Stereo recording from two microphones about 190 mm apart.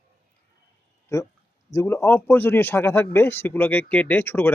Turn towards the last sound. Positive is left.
turn(degrees=10)  # may be behind; listen again after turning